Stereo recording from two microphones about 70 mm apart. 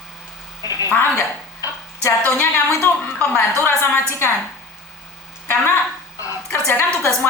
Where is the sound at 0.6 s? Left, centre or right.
Left.